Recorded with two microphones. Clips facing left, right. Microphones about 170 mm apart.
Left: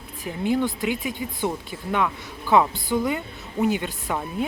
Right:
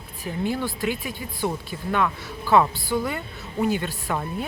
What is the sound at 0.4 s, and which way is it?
Speech, 20° left (ahead or behind).